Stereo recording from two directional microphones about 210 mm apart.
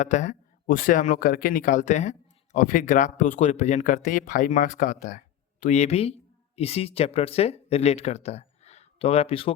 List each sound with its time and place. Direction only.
0.0 s a man's voice: 35° left (ahead or behind)